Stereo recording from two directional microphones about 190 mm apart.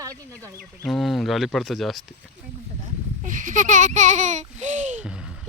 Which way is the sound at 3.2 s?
45° right (ahead or behind).